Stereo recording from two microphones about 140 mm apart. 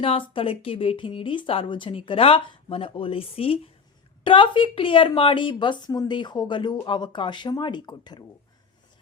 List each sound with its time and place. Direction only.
0.0 s speech: 40° left (ahead or behind)